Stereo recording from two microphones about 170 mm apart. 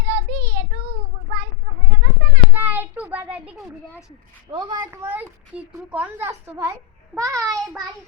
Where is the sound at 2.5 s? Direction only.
10° right (ahead or behind).